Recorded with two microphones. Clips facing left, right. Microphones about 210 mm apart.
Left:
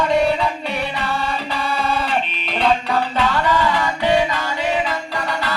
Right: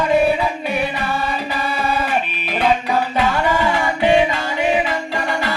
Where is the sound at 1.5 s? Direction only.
10° right (ahead or behind).